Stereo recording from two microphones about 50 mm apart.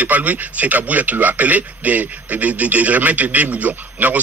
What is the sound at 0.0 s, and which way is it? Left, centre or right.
A man's voice, right.